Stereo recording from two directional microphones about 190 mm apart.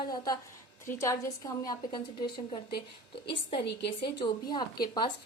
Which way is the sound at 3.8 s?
25° left (ahead or behind).